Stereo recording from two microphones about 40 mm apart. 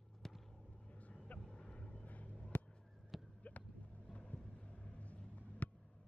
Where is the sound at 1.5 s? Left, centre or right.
Left.